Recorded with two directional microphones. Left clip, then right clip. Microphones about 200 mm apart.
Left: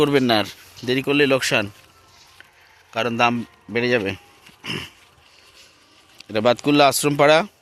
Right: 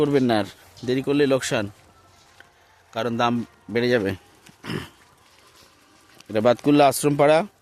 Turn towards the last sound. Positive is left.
turn(degrees=-5)  # may be behind; listen again after turning